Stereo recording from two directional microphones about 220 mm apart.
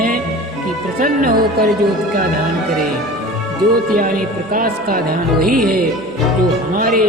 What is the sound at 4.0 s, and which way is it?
Speech, 40° right (ahead or behind).